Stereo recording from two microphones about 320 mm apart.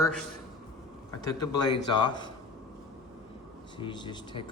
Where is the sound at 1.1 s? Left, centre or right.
Centre.